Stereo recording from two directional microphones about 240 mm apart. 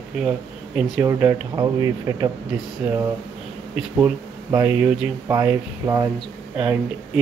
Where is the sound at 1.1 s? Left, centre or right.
Centre.